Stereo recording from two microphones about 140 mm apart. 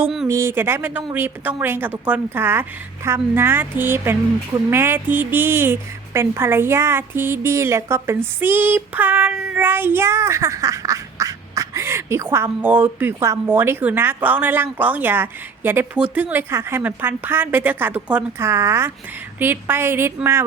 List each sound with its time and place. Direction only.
0.3 s speech: 20° right (ahead or behind)